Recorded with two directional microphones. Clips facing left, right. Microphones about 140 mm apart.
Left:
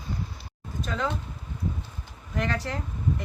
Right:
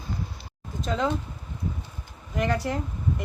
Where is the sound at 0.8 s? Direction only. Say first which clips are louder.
Right 4 dB; 20° right (ahead or behind).